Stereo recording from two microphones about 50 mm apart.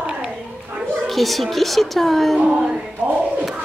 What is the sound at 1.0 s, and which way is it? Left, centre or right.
A woman's voice, centre.